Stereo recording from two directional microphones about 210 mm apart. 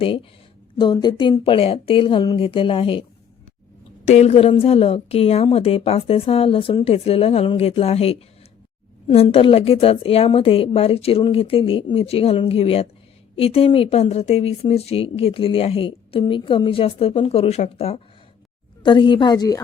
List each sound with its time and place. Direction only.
0.0 s speech: 25° left (ahead or behind)
4.0 s speech: 35° left (ahead or behind); by 19.6 s 20° left (ahead or behind)